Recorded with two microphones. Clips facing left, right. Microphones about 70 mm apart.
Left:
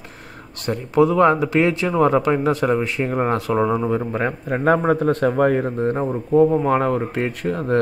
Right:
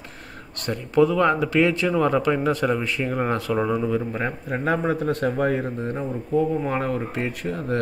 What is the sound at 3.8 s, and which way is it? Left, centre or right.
A man's voice, left.